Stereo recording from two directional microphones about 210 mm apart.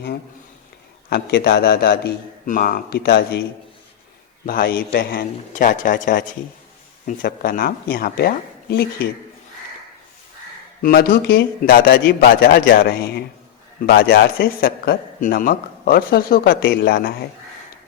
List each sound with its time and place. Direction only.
1.1 s a man's voice: 50° left (ahead or behind)
4.4 s a man's voice: 45° left (ahead or behind)
10.8 s a man's voice: 45° left (ahead or behind)